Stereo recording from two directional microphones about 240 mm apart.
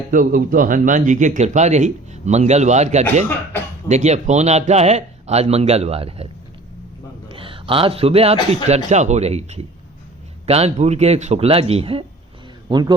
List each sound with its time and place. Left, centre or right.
0.1 s speech: right
7.3 s a man's voice: right